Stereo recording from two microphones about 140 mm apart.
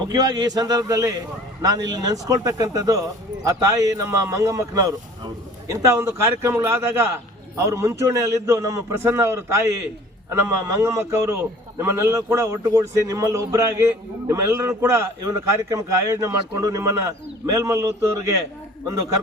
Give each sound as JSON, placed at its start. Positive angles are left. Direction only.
{"t": 0.1, "sound": "speech", "side_deg": -30}
{"t": 10.8, "sound": "speech", "side_deg": -20}